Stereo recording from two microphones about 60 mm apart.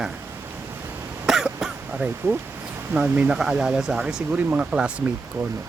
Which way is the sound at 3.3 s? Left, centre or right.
Centre.